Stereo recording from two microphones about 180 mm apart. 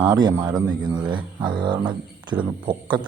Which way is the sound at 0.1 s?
20° right (ahead or behind).